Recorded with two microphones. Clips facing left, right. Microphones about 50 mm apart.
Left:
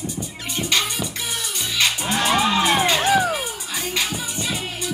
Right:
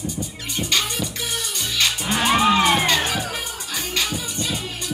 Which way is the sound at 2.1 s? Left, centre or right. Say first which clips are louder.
Right 3 dB; centre.